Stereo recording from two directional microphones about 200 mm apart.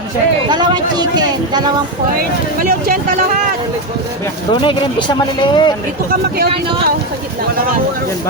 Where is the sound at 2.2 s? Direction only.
45° right (ahead or behind).